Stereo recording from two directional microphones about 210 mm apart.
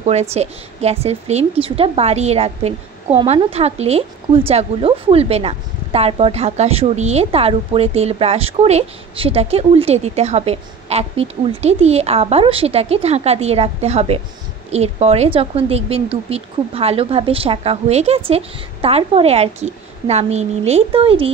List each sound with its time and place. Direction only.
0.0 s a woman's voice: 30° right (ahead or behind)